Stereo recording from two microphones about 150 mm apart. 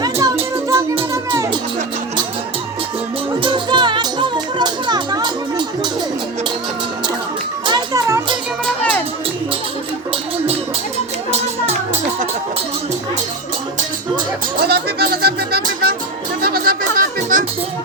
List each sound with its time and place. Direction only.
0.0 s music: 25° right (ahead or behind)
3.4 s music: 30° right (ahead or behind)
7.6 s music: 30° right (ahead or behind)
8.6 s music: 10° left (ahead or behind)
14.7 s music: 90° right; by 17.4 s 65° right (ahead or behind)